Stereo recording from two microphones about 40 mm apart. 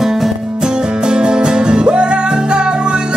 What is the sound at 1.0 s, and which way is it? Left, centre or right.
Music, right.